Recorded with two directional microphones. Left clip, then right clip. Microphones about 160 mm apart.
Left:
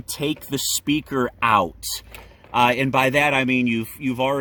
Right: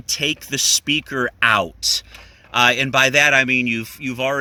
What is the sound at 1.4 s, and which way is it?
Speech, 60° right (ahead or behind).